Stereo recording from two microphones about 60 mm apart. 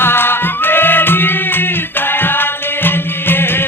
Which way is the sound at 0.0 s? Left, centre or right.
Left.